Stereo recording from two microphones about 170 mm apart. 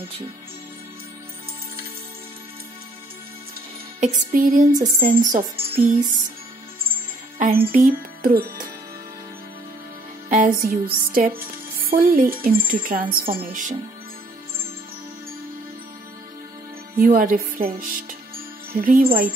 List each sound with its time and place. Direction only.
4.0 s music: 50° right (ahead or behind)
7.3 s speech: 55° right (ahead or behind)
10.3 s music: 55° right (ahead or behind)
17.0 s music: 55° right (ahead or behind)